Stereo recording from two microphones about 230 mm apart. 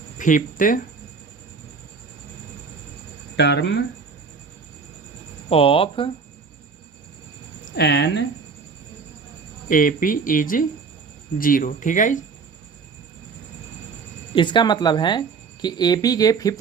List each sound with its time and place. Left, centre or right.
0.2 s speech: left
3.3 s speech: left
5.5 s speech: left
7.6 s speech: left
9.6 s speech: left
14.3 s speech: centre